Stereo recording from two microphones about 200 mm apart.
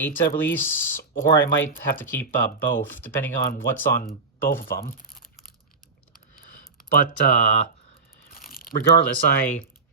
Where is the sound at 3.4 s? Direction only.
50° left (ahead or behind).